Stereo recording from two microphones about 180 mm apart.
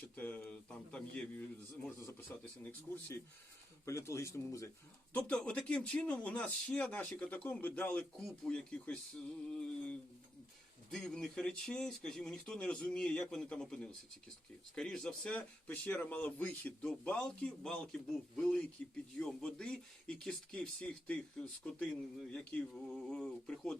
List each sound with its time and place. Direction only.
0.2 s speech: 10° left (ahead or behind)
3.8 s speech: 15° left (ahead or behind)
5.1 s speech: 5° left (ahead or behind)